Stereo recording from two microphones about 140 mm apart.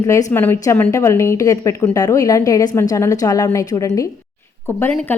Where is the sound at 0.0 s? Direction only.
25° left (ahead or behind).